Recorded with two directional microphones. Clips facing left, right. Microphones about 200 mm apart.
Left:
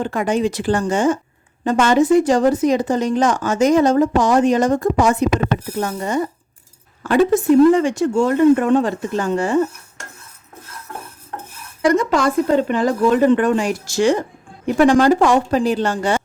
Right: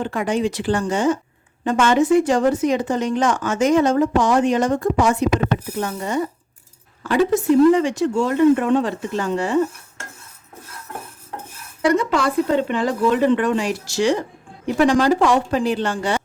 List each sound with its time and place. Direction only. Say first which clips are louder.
0.0 s speech: left 2 dB; 45° left (ahead or behind)
1.6 s speech: left 2 dB; 40° left (ahead or behind)
11.9 s speech: left 2 dB; 45° left (ahead or behind)